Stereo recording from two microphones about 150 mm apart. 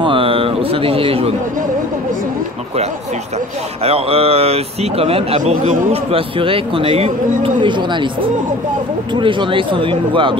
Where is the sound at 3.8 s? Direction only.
40° right (ahead or behind).